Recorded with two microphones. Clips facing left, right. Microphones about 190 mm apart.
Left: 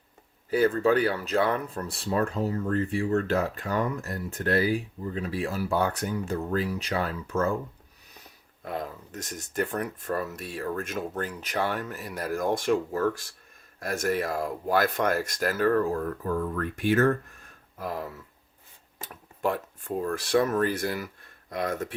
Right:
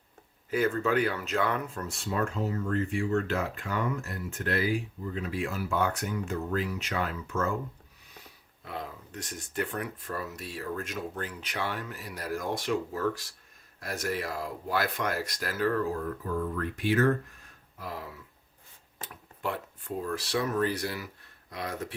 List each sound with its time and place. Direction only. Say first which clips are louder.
0.5 s speech: left 4 dB; 35° left (ahead or behind)
8.6 s speech: left 5 dB; 45° left (ahead or behind)
19.0 s a sound: left 6 dB; 45° left (ahead or behind)
20.0 s speech: left 6 dB; 50° left (ahead or behind)